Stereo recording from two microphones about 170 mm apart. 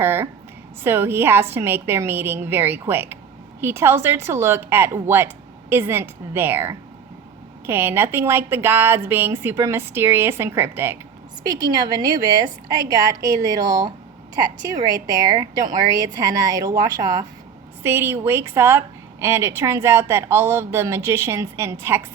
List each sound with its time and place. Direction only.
0.0 s a woman's voice: 15° right (ahead or behind)